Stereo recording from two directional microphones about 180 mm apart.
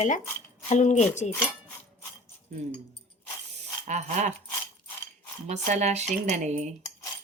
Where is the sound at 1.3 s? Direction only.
5° left (ahead or behind).